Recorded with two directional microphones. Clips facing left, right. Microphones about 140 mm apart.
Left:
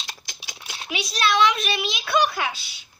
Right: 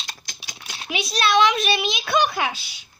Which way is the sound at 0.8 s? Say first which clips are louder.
Right 1 dB; 25° right (ahead or behind).